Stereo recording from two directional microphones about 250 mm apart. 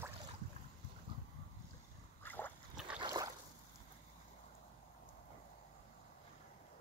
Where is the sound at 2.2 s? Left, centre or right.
Centre.